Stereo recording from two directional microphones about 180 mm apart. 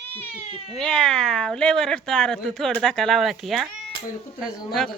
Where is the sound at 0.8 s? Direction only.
5° left (ahead or behind).